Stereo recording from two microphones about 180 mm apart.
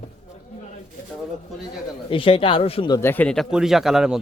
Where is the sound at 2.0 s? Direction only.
30° left (ahead or behind).